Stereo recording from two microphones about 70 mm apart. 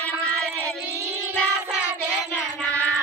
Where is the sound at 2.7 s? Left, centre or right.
Left.